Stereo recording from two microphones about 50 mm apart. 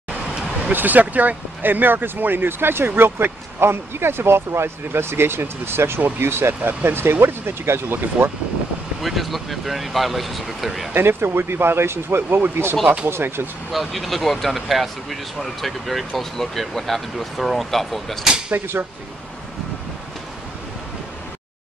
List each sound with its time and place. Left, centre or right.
0.7 s speech: right
9.0 s speech: centre
11.0 s speech: right
12.2 s speech: right
12.8 s speech: right
13.1 s speech: right
13.7 s speech: centre